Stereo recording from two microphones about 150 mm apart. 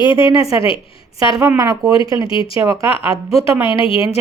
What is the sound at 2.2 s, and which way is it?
Speech, 35° left (ahead or behind).